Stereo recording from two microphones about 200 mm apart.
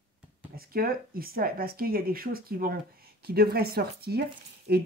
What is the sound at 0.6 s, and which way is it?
Speech, 45° right (ahead or behind).